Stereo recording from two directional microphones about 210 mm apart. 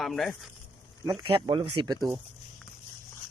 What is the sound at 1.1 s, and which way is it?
Speech, 20° right (ahead or behind).